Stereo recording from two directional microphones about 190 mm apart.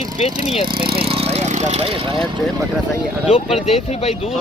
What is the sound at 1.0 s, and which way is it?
Vehicle, 30° right (ahead or behind).